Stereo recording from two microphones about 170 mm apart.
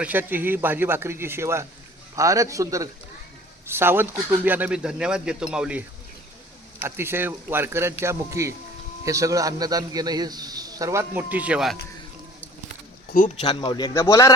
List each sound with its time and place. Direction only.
0.0 s a man's voice: 10° right (ahead or behind)
6.8 s a man's voice: 15° right (ahead or behind)
13.1 s speech: 50° left (ahead or behind)
13.5 s speech: 25° left (ahead or behind)